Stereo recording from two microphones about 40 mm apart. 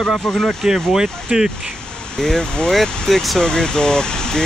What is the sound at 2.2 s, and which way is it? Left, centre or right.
Speech, centre.